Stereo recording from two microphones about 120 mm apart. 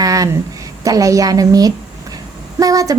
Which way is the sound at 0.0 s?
30° right (ahead or behind).